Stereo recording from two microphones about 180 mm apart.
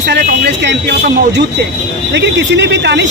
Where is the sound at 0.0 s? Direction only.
60° right (ahead or behind).